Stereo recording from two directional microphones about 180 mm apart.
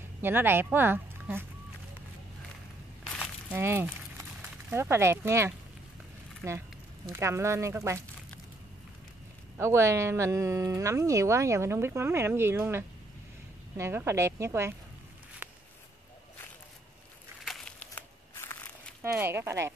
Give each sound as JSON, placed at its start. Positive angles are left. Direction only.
{"t": 0.2, "sound": "speech", "side_deg": -10}
{"t": 3.5, "sound": "speech", "side_deg": -15}
{"t": 9.6, "sound": "speech", "side_deg": -15}
{"t": 17.5, "sound": "crumpling", "side_deg": 5}
{"t": 19.1, "sound": "speech", "side_deg": -15}